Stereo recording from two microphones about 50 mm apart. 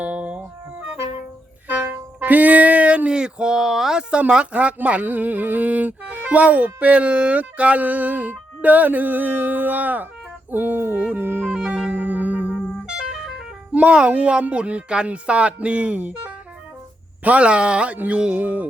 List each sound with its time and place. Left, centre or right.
0.0 s music: right
2.2 s a sound: right; by 4.0 s centre
4.1 s speech: right
11.0 s music: right
11.9 s music: right
13.0 s vehicle: centre
13.7 s speech: right
17.2 s speech: right